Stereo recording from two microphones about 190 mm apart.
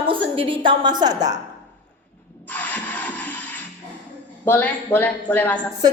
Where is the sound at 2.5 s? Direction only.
10° left (ahead or behind).